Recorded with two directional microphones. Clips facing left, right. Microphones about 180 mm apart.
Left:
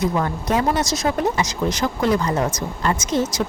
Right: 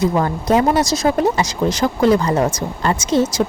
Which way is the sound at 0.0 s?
30° right (ahead or behind).